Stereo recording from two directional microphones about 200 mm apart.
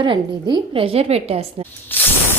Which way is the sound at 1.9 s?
10° left (ahead or behind).